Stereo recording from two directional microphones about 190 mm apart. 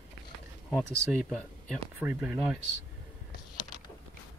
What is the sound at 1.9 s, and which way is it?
Speech, 5° right (ahead or behind).